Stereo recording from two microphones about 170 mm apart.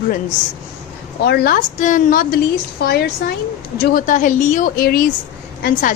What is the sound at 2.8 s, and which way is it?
Speech, 65° left (ahead or behind).